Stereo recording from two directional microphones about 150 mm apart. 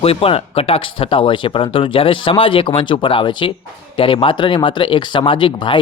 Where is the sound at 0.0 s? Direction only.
40° left (ahead or behind).